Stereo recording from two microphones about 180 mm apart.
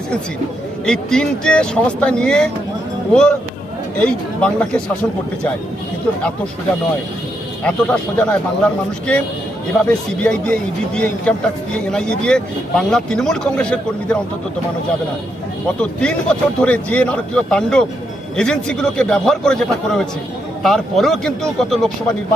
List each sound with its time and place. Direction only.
0.9 s speech: 5° left (ahead or behind)
7.6 s speech: 5° left (ahead or behind)
15.8 s speech: 5° left (ahead or behind)